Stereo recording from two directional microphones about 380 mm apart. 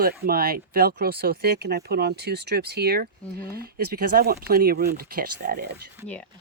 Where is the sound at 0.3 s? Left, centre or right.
Right.